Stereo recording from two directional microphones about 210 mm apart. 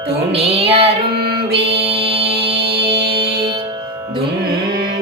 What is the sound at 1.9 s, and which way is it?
Music, 25° right (ahead or behind).